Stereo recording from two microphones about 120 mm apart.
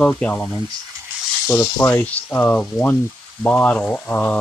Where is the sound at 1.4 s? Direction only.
25° left (ahead or behind).